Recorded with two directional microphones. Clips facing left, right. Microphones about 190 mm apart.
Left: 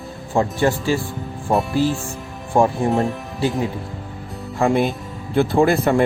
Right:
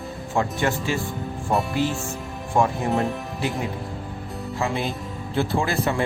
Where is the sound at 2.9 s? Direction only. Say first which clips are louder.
Left 4 dB; centre (ahead or behind).